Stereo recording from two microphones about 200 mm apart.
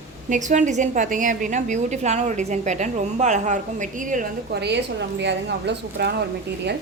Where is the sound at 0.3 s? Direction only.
40° right (ahead or behind).